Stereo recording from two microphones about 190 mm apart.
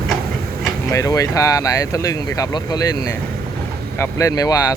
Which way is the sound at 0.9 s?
15° left (ahead or behind).